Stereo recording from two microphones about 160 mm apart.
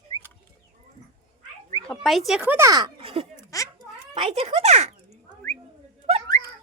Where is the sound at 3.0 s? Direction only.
40° right (ahead or behind).